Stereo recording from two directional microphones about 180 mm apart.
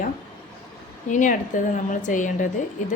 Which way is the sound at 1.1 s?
45° left (ahead or behind).